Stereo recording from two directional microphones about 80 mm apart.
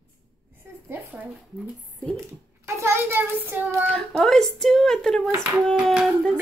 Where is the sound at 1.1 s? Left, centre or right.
Centre.